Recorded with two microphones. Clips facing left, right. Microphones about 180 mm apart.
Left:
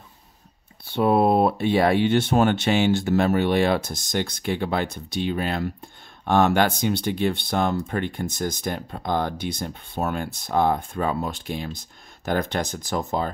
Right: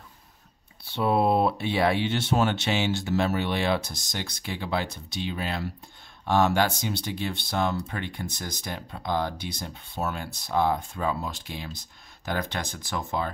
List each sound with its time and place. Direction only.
0.8 s speech: 50° left (ahead or behind)